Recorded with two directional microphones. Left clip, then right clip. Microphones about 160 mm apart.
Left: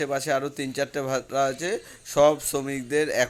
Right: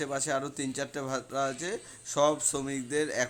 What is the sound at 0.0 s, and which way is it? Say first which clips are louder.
Speech: left 6 dB; 15° left (ahead or behind).